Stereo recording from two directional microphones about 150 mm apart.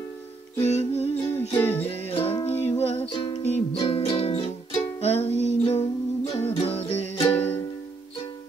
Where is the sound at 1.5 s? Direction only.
15° left (ahead or behind).